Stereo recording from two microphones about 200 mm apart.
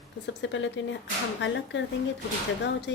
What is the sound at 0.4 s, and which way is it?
A woman's voice, 65° left (ahead or behind).